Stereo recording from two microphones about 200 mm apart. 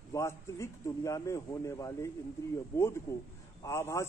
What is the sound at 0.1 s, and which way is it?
A man's voice, 15° left (ahead or behind).